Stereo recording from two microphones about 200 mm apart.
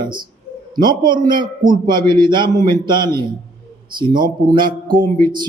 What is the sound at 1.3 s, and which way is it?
Speech, 20° right (ahead or behind).